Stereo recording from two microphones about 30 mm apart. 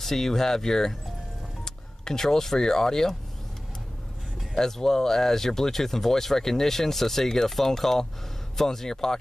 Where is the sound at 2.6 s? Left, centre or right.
Centre.